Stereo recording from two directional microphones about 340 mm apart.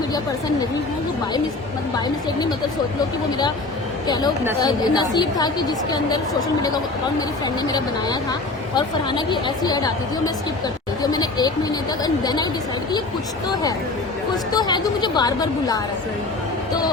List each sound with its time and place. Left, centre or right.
4.0 s speech: centre
7.7 s speech: centre
13.5 s speech: centre